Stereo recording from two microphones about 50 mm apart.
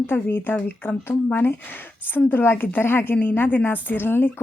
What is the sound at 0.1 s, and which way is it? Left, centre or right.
A woman's voice, left.